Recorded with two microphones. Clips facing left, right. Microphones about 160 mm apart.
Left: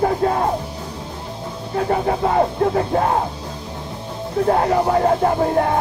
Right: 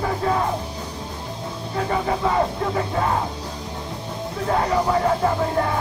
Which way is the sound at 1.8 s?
45° left (ahead or behind).